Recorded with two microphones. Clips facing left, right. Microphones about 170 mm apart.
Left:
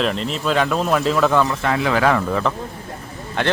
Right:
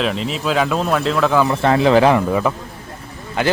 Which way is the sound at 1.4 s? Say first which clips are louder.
Right 6 dB; 30° right (ahead or behind).